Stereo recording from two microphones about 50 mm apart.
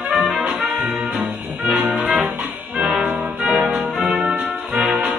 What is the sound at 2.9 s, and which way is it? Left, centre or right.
Music, centre.